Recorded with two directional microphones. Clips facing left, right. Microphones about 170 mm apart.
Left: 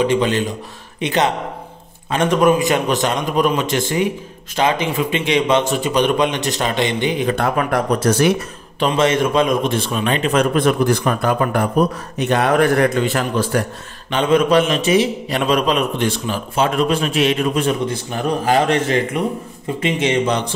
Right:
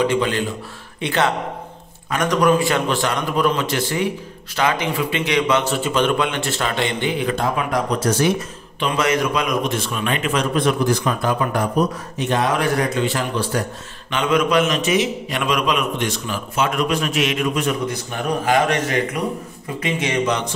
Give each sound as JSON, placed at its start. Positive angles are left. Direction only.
{"t": 0.0, "sound": "a man's voice", "side_deg": 20}
{"t": 7.3, "sound": "speech", "side_deg": 60}
{"t": 8.7, "sound": "a man's voice", "side_deg": 30}
{"t": 10.3, "sound": "speech", "side_deg": 50}
{"t": 14.1, "sound": "a man's voice", "side_deg": 30}